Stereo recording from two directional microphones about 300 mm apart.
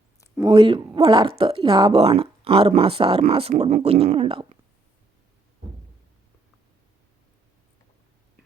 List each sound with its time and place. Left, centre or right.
0.5 s speech: centre